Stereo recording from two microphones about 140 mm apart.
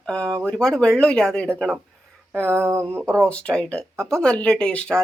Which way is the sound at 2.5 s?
20° right (ahead or behind).